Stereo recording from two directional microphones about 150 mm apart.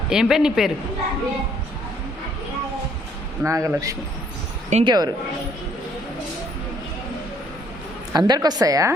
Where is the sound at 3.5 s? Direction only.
20° right (ahead or behind).